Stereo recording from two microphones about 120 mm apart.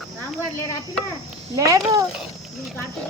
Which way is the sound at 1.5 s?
30° right (ahead or behind).